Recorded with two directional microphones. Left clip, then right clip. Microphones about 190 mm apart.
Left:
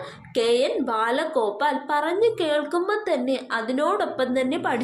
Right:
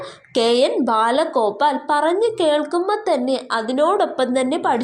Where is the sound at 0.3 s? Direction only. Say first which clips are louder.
Right 5 dB; 35° right (ahead or behind).